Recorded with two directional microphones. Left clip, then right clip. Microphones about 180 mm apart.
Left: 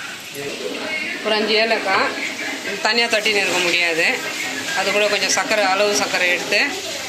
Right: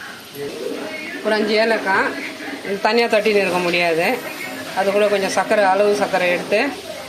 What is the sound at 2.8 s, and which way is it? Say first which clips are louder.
Speech: right 2 dB; 50° right (ahead or behind).